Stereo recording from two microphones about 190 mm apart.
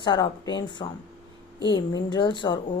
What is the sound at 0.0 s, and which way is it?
Speech, 25° left (ahead or behind).